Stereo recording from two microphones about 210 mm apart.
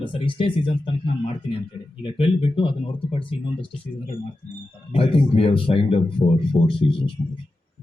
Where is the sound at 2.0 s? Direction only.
25° left (ahead or behind).